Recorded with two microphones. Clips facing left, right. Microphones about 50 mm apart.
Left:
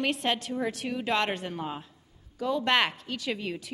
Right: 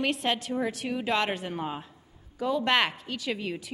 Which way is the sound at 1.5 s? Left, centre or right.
Centre.